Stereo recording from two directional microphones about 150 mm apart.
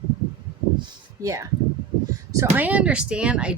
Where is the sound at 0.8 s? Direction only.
20° right (ahead or behind).